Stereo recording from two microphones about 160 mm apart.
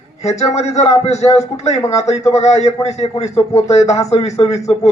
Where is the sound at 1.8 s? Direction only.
20° left (ahead or behind).